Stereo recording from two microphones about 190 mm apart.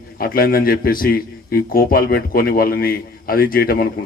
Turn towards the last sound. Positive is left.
turn(degrees=50)  # may be behind; listen again after turning